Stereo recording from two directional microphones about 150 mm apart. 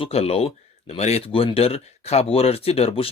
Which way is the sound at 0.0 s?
40° left (ahead or behind).